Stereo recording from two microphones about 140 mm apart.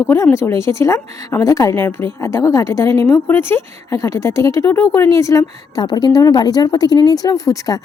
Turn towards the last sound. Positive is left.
turn(degrees=25)  # may be behind; listen again after turning